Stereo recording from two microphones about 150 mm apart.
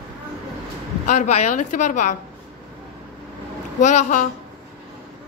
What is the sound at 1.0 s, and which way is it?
A woman's voice, 55° left (ahead or behind).